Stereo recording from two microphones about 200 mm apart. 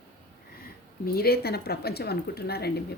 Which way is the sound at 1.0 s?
50° left (ahead or behind).